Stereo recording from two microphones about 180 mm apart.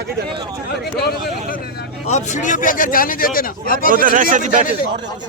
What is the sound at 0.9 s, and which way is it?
Speech, 60° left (ahead or behind).